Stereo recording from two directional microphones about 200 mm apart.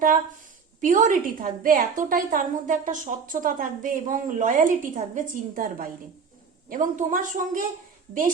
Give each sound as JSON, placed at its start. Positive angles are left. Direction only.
{"t": 0.8, "sound": "a woman's voice", "side_deg": -40}